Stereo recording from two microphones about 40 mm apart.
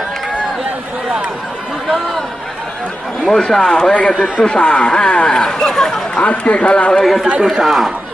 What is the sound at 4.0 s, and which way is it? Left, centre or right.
A man's voice, left.